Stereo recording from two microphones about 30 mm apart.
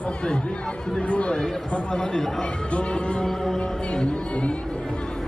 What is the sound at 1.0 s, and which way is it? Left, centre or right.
Chatter, left.